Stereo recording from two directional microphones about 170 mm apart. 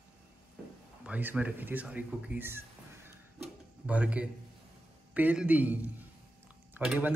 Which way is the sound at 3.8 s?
5° right (ahead or behind).